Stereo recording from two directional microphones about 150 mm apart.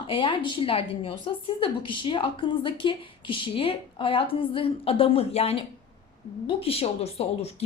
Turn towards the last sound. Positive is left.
turn(degrees=45)  # may be behind; listen again after turning